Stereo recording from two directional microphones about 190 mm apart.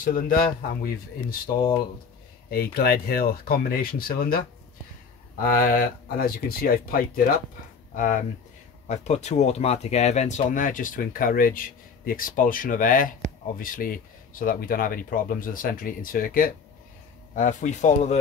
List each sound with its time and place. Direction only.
0.0 s speech: 45° left (ahead or behind)
2.5 s speech: 55° left (ahead or behind); by 18.1 s 40° left (ahead or behind)